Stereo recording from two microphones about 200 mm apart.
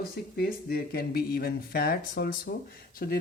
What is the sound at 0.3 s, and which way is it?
Speech, 50° left (ahead or behind).